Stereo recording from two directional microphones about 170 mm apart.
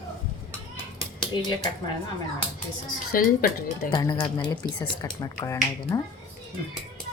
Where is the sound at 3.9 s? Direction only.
25° left (ahead or behind).